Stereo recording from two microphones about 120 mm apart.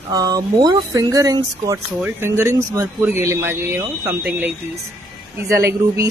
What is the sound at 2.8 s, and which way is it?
Speech, 10° right (ahead or behind).